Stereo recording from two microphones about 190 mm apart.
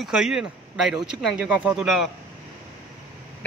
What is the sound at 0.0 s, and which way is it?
A man's voice, 5° right (ahead or behind).